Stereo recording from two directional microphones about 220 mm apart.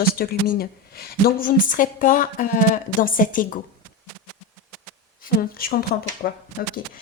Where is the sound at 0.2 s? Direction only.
45° left (ahead or behind).